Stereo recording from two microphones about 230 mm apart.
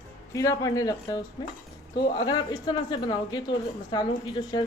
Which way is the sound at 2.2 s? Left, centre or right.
Centre.